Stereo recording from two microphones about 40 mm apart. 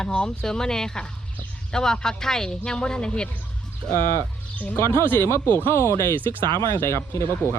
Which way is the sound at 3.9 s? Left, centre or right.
Left.